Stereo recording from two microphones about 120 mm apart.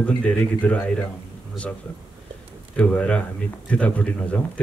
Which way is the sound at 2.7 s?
10° left (ahead or behind).